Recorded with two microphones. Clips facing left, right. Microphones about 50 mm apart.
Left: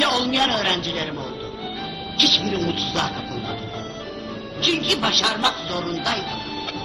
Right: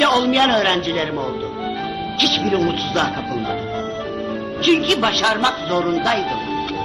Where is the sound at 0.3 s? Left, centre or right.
Right.